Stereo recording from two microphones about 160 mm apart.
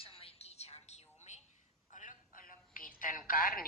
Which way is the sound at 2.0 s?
55° left (ahead or behind).